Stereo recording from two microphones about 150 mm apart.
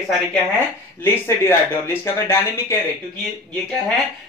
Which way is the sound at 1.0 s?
15° left (ahead or behind).